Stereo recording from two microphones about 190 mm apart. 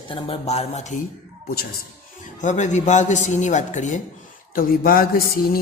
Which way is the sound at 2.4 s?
40° left (ahead or behind).